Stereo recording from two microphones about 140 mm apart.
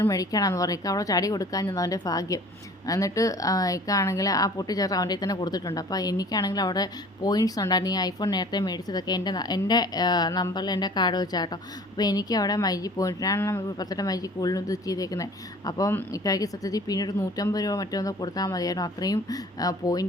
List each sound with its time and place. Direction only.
0.0 s speech: 25° left (ahead or behind)